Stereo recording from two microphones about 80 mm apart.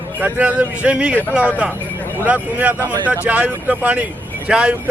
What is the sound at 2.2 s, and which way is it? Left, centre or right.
Speech, centre.